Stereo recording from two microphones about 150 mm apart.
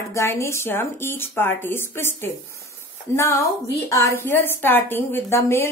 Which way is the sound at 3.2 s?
20° left (ahead or behind).